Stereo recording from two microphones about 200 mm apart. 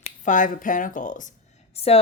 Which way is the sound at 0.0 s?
40° left (ahead or behind).